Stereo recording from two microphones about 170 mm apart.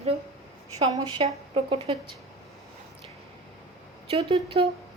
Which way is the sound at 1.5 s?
30° right (ahead or behind).